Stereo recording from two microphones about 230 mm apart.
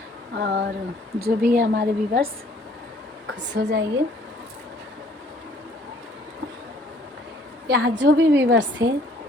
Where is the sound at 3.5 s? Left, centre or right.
Right.